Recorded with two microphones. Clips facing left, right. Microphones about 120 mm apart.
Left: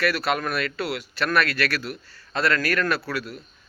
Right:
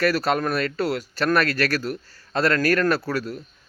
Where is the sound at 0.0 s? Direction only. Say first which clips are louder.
Right 3 dB; 40° right (ahead or behind).